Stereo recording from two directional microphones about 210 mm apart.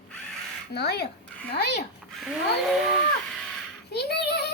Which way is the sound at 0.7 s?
50° left (ahead or behind).